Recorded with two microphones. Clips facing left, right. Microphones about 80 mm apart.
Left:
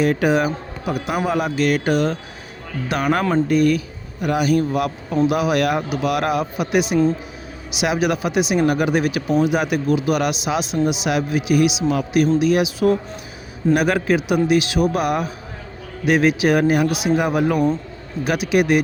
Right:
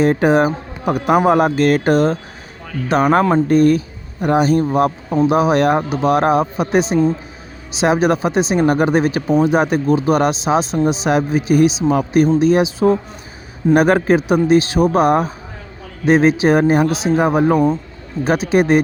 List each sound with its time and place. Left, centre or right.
0.0 s speech: right
0.9 s speech: right